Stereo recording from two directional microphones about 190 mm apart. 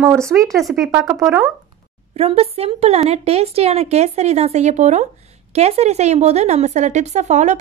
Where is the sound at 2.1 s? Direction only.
35° right (ahead or behind).